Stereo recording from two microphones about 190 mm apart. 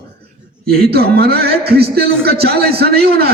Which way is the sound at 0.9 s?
55° right (ahead or behind).